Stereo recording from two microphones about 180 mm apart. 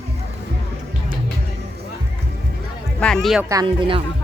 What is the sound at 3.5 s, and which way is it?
Speech, 25° right (ahead or behind).